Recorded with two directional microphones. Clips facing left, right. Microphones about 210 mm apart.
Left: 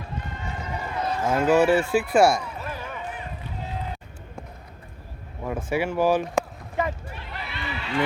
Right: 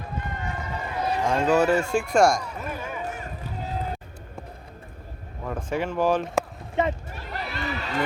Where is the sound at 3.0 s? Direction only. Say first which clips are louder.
Right 2 dB; 45° right (ahead or behind).